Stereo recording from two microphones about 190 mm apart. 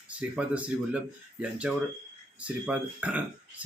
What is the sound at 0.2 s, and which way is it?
Speech, 5° right (ahead or behind).